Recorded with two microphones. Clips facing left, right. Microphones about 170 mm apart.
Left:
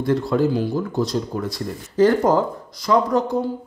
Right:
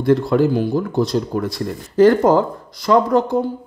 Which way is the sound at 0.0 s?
65° right (ahead or behind).